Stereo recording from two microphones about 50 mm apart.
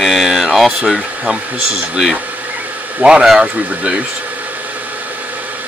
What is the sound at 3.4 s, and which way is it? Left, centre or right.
Speech, right.